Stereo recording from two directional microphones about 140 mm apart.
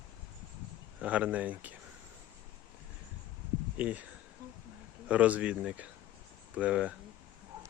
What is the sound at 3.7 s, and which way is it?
Speech, 10° right (ahead or behind).